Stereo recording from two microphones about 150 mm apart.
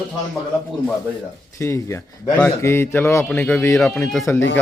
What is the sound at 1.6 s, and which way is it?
Speech, 20° left (ahead or behind).